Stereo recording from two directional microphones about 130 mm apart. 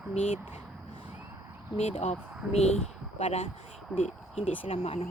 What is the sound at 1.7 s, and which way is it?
Speech, 55° left (ahead or behind).